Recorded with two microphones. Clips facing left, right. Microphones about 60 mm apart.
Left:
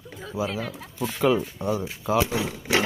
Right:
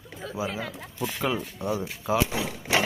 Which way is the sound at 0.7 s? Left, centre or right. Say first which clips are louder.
Left 1 dB; centre.